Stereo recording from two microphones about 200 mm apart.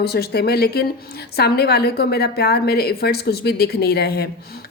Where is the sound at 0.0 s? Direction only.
55° left (ahead or behind).